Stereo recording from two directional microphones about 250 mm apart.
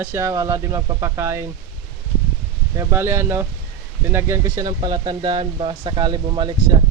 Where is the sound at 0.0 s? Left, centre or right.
Centre.